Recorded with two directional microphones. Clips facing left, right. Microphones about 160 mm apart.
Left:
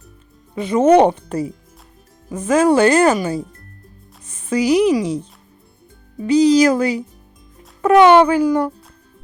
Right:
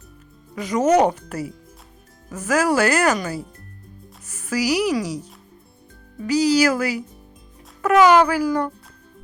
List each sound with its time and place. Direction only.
0.5 s speech: 25° left (ahead or behind)